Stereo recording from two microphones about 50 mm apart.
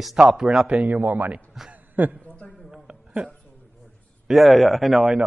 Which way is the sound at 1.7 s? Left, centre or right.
Right.